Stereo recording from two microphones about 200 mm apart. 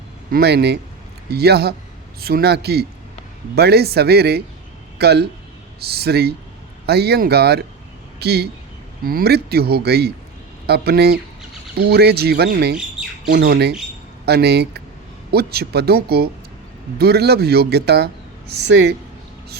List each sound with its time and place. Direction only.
0.3 s speech: 50° right (ahead or behind)
13.0 s squawk: 45° right (ahead or behind)
14.3 s speech: 55° right (ahead or behind)